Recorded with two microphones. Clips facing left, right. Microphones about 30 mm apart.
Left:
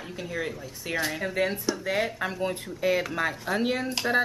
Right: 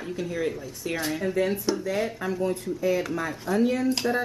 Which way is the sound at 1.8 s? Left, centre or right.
Left.